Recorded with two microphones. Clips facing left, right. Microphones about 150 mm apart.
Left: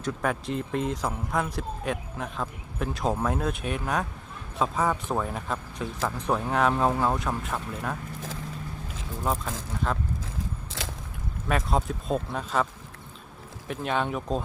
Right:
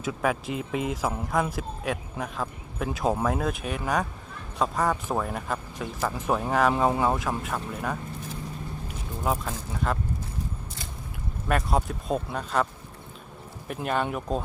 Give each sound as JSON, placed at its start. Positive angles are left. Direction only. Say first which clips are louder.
{"t": 0.0, "sound": "speech", "louder": "right 1 dB", "side_deg": -5}
{"t": 9.2, "sound": "speech", "louder": "right 1 dB", "side_deg": -5}
{"t": 10.8, "sound": "a sound", "louder": "left 5 dB", "side_deg": 90}
{"t": 11.4, "sound": "speech", "louder": "right 1 dB", "side_deg": 0}
{"t": 13.7, "sound": "speech", "louder": "even", "side_deg": -5}